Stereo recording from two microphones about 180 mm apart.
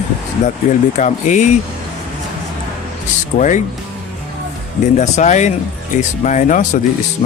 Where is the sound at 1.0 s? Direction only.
45° left (ahead or behind).